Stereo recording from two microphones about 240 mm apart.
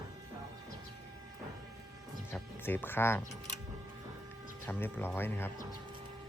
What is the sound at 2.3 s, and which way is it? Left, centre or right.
Speech, centre.